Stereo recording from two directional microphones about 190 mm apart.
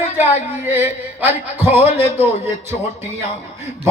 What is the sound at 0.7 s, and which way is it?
A man's voice, 10° right (ahead or behind).